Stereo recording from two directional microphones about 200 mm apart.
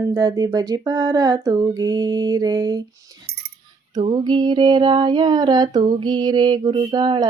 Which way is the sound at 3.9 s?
20° right (ahead or behind).